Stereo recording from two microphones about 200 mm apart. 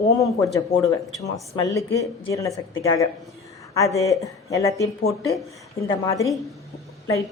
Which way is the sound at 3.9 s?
15° left (ahead or behind).